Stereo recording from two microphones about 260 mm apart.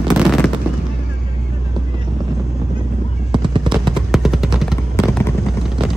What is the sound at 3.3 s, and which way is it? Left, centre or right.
Fireworks, centre.